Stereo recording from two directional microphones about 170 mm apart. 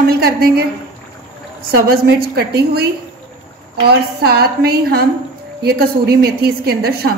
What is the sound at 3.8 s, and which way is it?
A woman's voice, 70° right (ahead or behind).